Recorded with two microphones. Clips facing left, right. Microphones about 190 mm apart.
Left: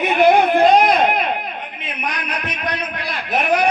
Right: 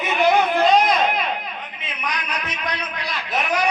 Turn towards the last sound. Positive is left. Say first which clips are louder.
# left 5 dB
turn(degrees=55)  # may be behind; listen again after turning